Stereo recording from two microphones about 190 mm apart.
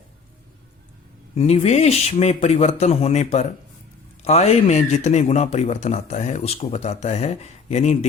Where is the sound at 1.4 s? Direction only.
35° left (ahead or behind).